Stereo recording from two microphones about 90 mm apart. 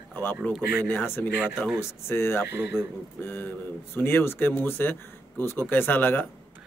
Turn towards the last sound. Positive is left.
turn(degrees=20)  # may be behind; listen again after turning